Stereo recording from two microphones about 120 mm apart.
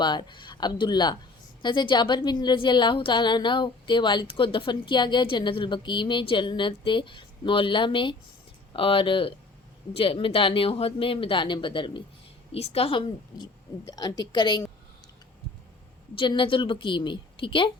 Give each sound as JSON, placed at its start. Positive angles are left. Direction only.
{"t": 0.0, "sound": "a woman's voice", "side_deg": 40}
{"t": 12.5, "sound": "a woman's voice", "side_deg": 55}
{"t": 16.1, "sound": "speech", "side_deg": 45}